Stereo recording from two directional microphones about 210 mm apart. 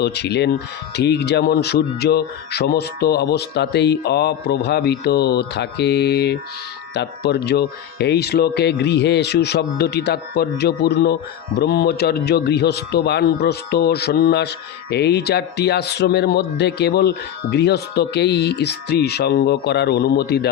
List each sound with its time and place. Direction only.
0.0 s a man's voice: 50° left (ahead or behind)